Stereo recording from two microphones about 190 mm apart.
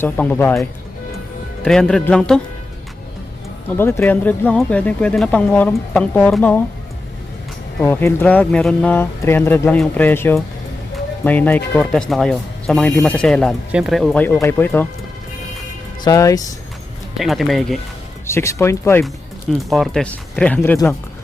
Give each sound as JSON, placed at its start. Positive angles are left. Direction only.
{"t": 0.0, "sound": "speech", "side_deg": 10}
{"t": 1.6, "sound": "speech", "side_deg": 5}
{"t": 3.8, "sound": "speech", "side_deg": 10}
{"t": 7.8, "sound": "speech", "side_deg": 10}
{"t": 16.0, "sound": "speech", "side_deg": 20}
{"t": 17.2, "sound": "speech", "side_deg": 0}
{"t": 18.3, "sound": "speech", "side_deg": 15}
{"t": 19.5, "sound": "speech", "side_deg": 0}